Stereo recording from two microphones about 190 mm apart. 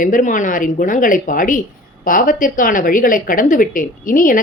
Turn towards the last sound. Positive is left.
turn(degrees=45)  # may be behind; listen again after turning